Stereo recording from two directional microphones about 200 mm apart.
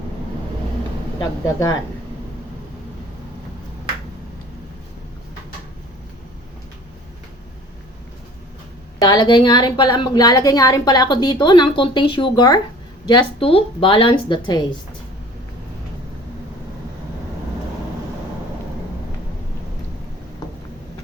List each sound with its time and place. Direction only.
9.0 s a woman's voice: 20° left (ahead or behind)